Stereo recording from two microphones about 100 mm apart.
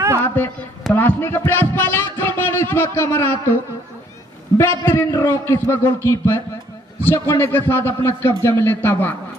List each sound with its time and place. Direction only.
0.2 s a man's voice: 20° left (ahead or behind)
4.6 s a man's voice: 25° left (ahead or behind)